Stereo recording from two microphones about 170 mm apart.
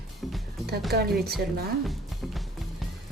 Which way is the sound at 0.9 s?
70° right (ahead or behind).